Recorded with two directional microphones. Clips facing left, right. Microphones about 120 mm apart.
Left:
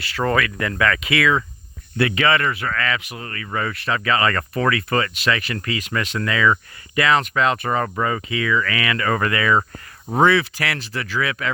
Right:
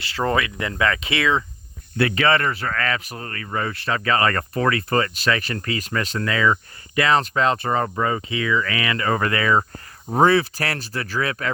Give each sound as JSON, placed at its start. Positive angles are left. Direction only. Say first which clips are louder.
{"t": 0.0, "sound": "speech", "louder": "left 1 dB", "side_deg": -25}